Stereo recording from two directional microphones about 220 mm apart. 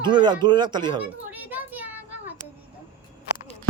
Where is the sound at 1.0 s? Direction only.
10° right (ahead or behind).